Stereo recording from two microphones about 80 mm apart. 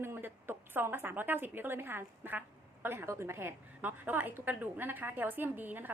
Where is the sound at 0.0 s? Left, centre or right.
Right.